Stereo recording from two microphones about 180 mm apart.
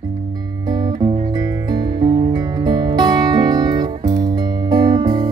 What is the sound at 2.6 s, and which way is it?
Music, 25° right (ahead or behind).